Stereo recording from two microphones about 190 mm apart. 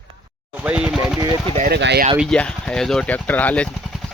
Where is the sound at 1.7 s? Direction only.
60° right (ahead or behind).